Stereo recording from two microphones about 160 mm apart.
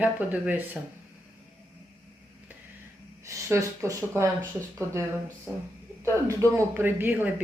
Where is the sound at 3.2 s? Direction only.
20° right (ahead or behind).